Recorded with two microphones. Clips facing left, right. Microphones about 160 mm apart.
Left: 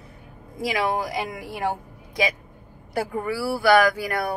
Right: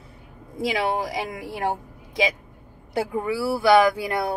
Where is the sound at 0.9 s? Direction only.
30° right (ahead or behind).